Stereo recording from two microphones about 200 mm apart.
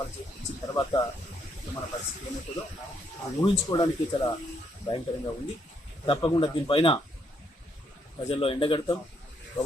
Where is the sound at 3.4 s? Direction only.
20° left (ahead or behind).